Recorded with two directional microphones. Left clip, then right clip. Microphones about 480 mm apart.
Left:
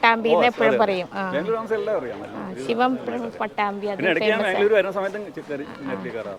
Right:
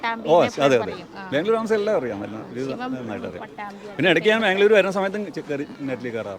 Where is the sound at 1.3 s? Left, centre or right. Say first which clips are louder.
Right 5 dB; right.